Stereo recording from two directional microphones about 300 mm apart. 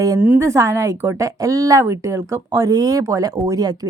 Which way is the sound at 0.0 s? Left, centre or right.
Centre.